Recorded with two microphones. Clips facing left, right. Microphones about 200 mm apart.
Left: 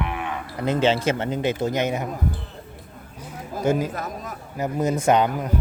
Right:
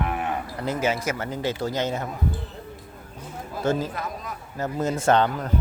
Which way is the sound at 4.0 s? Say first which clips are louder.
Left 1 dB; 45° left (ahead or behind).